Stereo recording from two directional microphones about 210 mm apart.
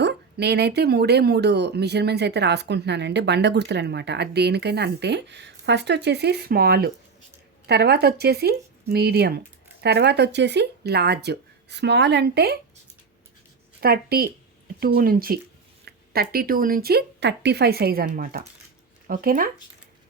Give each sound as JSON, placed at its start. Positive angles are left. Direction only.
{"t": 0.0, "sound": "speech", "side_deg": -50}
{"t": 13.8, "sound": "speech", "side_deg": -45}